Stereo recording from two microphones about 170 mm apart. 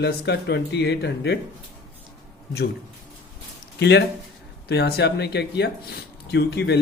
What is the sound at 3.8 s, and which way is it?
Speech, 90° left.